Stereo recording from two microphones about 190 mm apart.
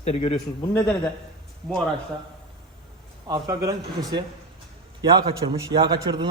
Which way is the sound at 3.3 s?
20° right (ahead or behind).